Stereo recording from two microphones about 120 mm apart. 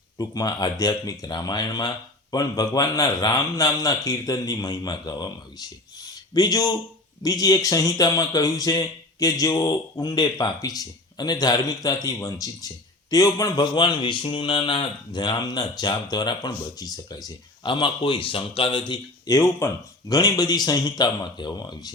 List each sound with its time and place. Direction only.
0.2 s a man's voice: 35° left (ahead or behind)